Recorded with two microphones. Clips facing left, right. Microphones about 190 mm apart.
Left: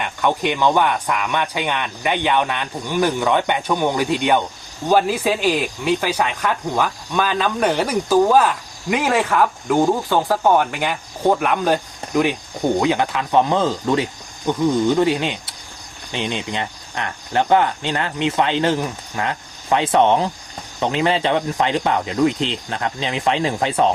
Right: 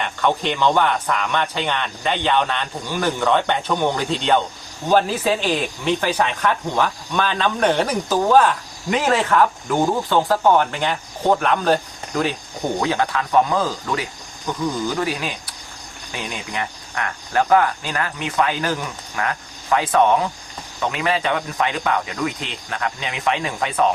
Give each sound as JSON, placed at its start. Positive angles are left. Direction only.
{"t": 0.0, "sound": "speech", "side_deg": 10}